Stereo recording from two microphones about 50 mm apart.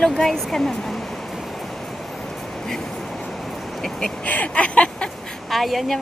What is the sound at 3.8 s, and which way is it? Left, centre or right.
Speech, centre.